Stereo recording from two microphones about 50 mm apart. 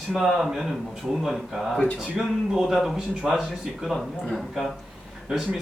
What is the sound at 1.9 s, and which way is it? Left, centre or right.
Speech, right.